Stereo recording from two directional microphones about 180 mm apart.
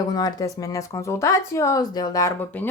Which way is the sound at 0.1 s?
20° left (ahead or behind).